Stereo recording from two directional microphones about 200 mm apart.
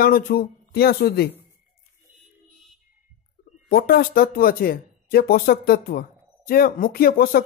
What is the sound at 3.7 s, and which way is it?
Speech, 45° left (ahead or behind).